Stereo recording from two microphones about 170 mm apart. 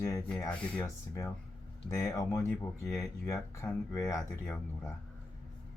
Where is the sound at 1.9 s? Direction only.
15° left (ahead or behind).